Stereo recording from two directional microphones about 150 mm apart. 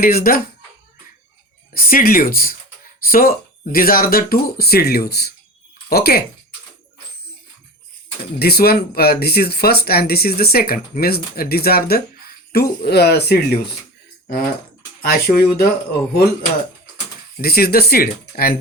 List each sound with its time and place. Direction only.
0.0 s speech: 80° left
1.7 s speech: 75° left (ahead or behind)
8.4 s speech: 90° left
15.0 s speech: 90° left
17.4 s speech: 90° left